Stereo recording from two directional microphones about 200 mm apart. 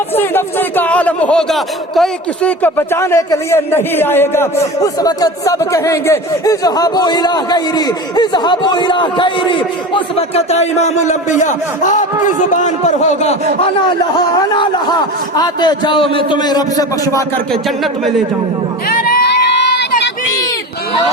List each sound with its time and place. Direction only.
0.2 s a man's voice: 10° left (ahead or behind); by 13.3 s 35° left (ahead or behind)
14.5 s speech: 20° left (ahead or behind)
18.9 s crowd: 50° left (ahead or behind)